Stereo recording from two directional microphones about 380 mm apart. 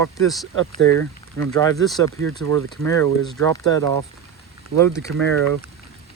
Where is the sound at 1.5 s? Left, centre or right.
Centre.